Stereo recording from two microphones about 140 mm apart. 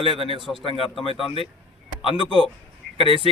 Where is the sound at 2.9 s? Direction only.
40° left (ahead or behind).